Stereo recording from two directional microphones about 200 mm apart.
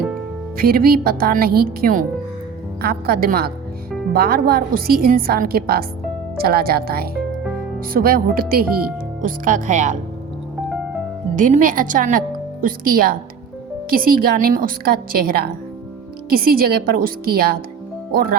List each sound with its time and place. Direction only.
0.5 s speech: 50° right (ahead or behind)
11.3 s a woman's voice: 40° right (ahead or behind)